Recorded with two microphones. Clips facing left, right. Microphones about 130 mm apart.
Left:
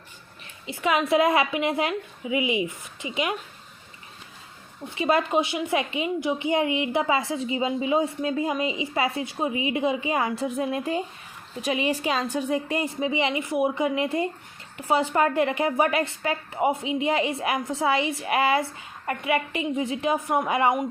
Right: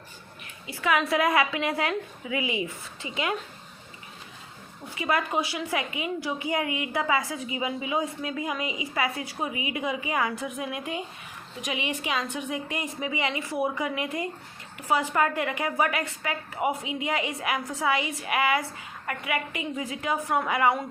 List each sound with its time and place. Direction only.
0.7 s a woman's voice: 20° left (ahead or behind)
4.9 s a woman's voice: 25° left (ahead or behind)